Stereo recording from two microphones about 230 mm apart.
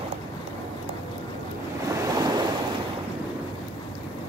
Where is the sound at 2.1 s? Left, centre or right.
Centre.